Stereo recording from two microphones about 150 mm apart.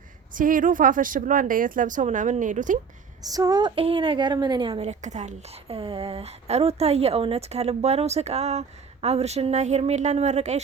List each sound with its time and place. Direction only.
0.3 s a woman's voice: 65° right (ahead or behind)
3.2 s a woman's voice: 25° right (ahead or behind); by 10.6 s 50° right (ahead or behind)